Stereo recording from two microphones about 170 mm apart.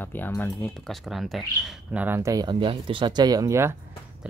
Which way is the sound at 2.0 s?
15° right (ahead or behind).